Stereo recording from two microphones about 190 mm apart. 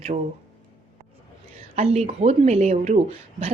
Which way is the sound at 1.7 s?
35° right (ahead or behind).